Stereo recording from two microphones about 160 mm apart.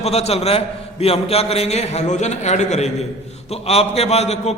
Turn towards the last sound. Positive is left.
turn(degrees=40)  # may be behind; listen again after turning